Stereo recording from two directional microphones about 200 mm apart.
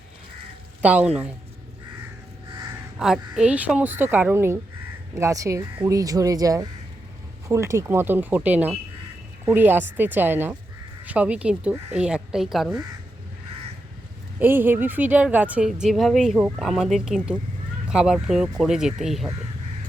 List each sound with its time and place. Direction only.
0.8 s a woman's voice: 5° right (ahead or behind)
3.0 s a woman's voice: 5° right (ahead or behind)
14.3 s a woman's voice: 10° right (ahead or behind)